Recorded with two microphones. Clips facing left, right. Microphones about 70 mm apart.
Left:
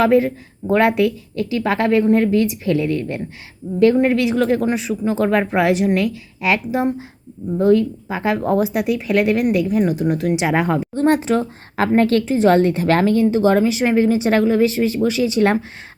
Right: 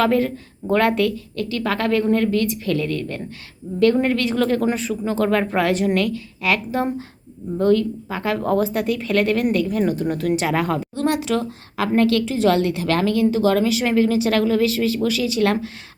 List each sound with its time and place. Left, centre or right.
0.0 s speech: centre
10.4 s speech: left
10.8 s a woman's voice: left